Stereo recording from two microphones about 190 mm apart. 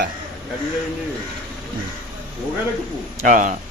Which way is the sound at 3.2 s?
45° right (ahead or behind).